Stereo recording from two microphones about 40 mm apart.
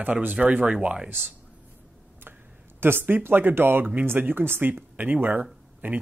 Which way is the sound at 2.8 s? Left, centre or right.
Right.